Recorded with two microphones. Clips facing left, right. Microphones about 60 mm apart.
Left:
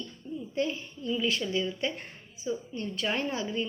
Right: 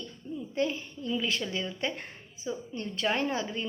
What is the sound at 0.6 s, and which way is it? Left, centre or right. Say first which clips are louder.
A woman's voice: right 1 dB; right.